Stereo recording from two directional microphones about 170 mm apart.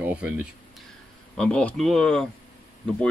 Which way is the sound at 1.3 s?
5° left (ahead or behind).